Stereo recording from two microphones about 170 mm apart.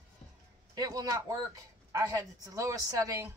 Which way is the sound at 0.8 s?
20° right (ahead or behind).